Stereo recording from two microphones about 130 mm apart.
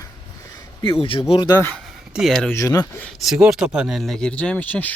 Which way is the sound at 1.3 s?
40° left (ahead or behind).